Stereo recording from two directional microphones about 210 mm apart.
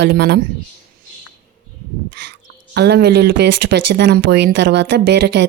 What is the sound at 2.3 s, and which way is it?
Speech, 55° right (ahead or behind).